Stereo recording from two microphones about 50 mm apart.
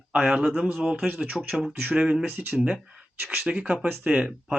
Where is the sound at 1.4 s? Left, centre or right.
Centre.